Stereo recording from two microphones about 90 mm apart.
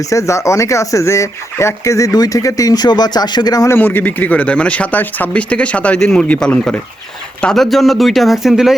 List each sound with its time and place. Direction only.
0.0 s speech: 35° left (ahead or behind)
3.7 s speech: 25° left (ahead or behind); by 8.7 s 5° right (ahead or behind)